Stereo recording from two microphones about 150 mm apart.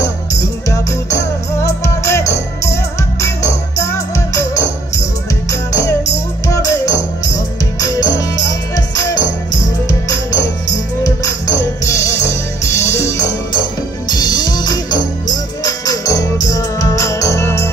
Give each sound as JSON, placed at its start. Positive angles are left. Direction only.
{"t": 0.0, "sound": "music", "side_deg": 20}